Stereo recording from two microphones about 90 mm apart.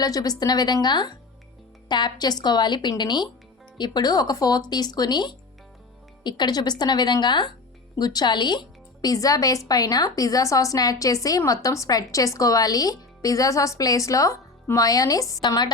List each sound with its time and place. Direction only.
0.0 s a woman's voice: 45° left (ahead or behind)